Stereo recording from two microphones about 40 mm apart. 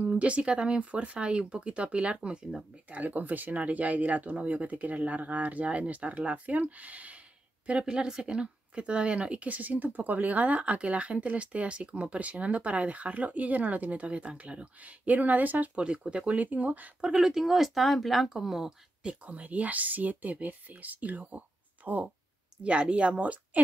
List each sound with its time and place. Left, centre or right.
0.1 s speech: right
2.9 s speech: right
7.8 s speech: right
15.7 s speech: right
17.0 s speech: centre
18.3 s speech: centre
19.2 s speech: right
22.6 s speech: right